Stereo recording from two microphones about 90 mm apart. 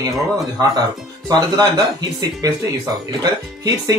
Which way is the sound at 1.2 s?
45° right (ahead or behind).